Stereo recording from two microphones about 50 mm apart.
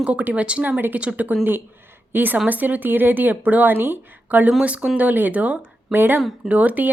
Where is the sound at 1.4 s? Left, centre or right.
Right.